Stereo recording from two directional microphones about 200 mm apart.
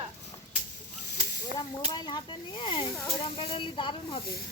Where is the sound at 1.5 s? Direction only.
20° left (ahead or behind).